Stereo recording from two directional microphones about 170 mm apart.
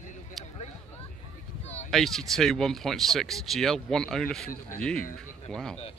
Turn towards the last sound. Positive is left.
turn(degrees=5)  # may be behind; listen again after turning